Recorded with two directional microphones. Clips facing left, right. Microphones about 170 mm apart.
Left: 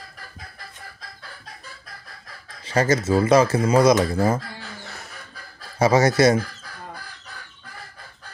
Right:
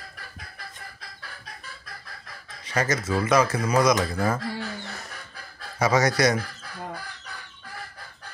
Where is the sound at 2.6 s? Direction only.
30° left (ahead or behind).